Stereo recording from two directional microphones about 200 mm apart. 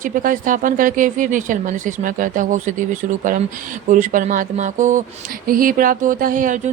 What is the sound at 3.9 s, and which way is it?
Speech, 40° right (ahead or behind).